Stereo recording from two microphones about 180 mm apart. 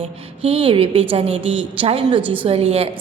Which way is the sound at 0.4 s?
30° right (ahead or behind).